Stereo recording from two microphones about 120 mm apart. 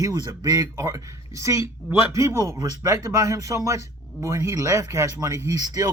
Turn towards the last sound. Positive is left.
turn(degrees=-30)  # may be behind; listen again after turning